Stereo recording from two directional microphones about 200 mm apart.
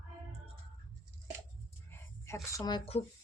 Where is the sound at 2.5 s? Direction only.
20° left (ahead or behind).